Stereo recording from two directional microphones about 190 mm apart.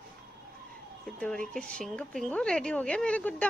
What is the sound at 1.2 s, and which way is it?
A woman's voice, 5° left (ahead or behind).